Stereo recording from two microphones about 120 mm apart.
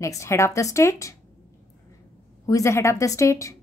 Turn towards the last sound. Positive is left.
turn(degrees=25)  # may be behind; listen again after turning